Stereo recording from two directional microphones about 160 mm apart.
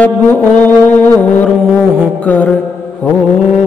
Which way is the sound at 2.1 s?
10° left (ahead or behind).